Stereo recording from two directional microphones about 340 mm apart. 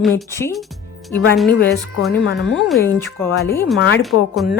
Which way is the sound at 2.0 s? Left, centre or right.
Centre.